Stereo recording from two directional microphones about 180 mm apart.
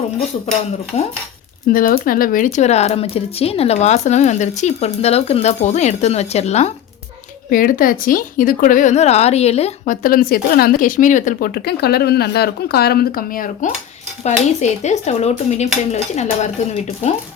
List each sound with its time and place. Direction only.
1.6 s speech: 50° left (ahead or behind)
7.5 s a woman's voice: 50° left (ahead or behind)
14.3 s speech: 40° left (ahead or behind)